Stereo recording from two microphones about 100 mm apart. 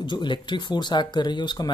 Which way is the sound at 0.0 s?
50° left (ahead or behind).